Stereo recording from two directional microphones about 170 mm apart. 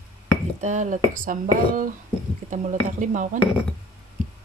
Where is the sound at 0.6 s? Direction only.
45° right (ahead or behind).